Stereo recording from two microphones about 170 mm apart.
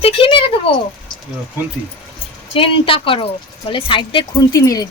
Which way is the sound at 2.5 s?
30° left (ahead or behind).